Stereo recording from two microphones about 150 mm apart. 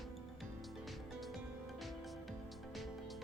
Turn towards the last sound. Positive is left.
turn(degrees=0)  # may be behind; listen again after turning